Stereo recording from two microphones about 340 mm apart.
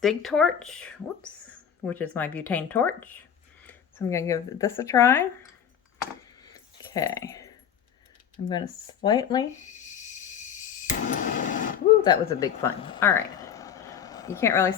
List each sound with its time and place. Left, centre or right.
0.0 s speech: centre
6.4 s keys jangling: centre
8.4 s speech: centre
9.0 s a sound: centre
12.0 s speech: centre